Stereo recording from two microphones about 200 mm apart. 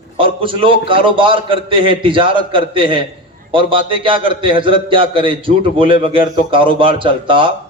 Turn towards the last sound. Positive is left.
turn(degrees=-25)  # may be behind; listen again after turning